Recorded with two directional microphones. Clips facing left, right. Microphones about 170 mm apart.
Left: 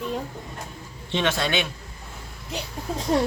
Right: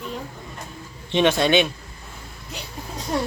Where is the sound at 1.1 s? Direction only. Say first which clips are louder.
Right 6 dB; 20° right (ahead or behind).